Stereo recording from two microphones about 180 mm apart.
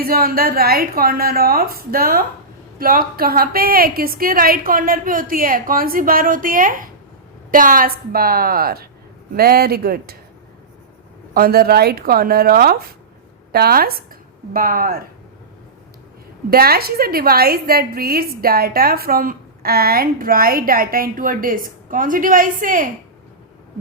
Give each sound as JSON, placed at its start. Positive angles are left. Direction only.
{"t": 0.0, "sound": "a woman's voice", "side_deg": -55}
{"t": 11.3, "sound": "a woman's voice", "side_deg": -55}
{"t": 16.5, "sound": "a woman's voice", "side_deg": -60}